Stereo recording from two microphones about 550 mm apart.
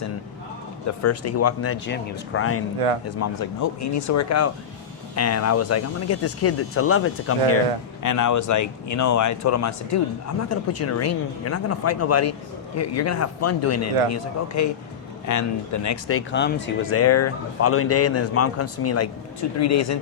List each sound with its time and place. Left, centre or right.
0.9 s speech: left
2.7 s speech: right
3.2 s speech: left